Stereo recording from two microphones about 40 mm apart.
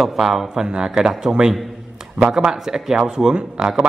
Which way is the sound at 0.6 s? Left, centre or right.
Right.